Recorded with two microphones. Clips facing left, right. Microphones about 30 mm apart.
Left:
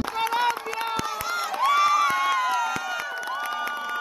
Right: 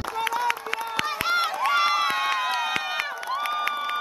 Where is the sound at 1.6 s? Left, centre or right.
Right.